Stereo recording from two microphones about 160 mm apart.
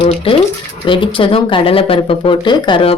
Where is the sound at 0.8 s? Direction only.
30° left (ahead or behind).